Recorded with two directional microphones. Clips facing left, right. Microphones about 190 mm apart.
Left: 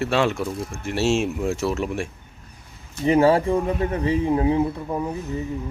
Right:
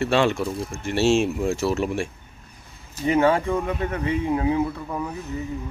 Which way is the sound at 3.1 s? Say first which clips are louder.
Left 3 dB; 35° left (ahead or behind).